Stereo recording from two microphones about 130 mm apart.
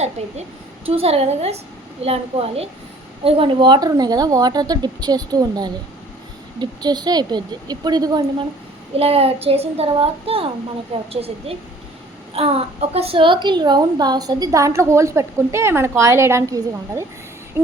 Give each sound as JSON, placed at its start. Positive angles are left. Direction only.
{"t": 0.2, "sound": "a woman's voice", "side_deg": -60}
{"t": 0.9, "sound": "child singing", "side_deg": -50}
{"t": 3.2, "sound": "speech", "side_deg": -45}
{"t": 9.0, "sound": "child singing", "side_deg": -50}
{"t": 12.3, "sound": "a woman's voice", "side_deg": -50}